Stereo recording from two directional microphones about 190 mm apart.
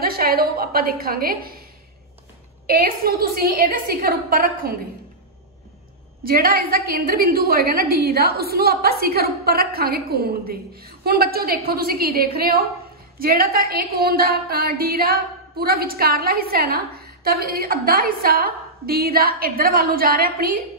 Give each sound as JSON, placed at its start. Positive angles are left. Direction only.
{"t": 0.0, "sound": "a woman's voice", "side_deg": -50}
{"t": 2.6, "sound": "a woman's voice", "side_deg": -55}
{"t": 6.2, "sound": "a woman's voice", "side_deg": -50}